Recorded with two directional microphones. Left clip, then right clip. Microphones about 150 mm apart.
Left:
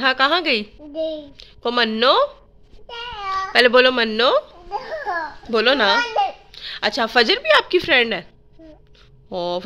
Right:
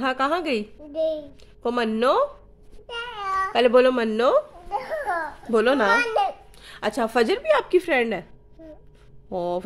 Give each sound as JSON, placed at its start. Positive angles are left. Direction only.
{"t": 0.0, "sound": "a woman's voice", "side_deg": -5}
{"t": 2.9, "sound": "cat", "side_deg": -20}
{"t": 3.3, "sound": "a sound", "side_deg": -10}
{"t": 5.5, "sound": "a child's voice", "side_deg": -20}
{"t": 9.3, "sound": "a woman's voice", "side_deg": -15}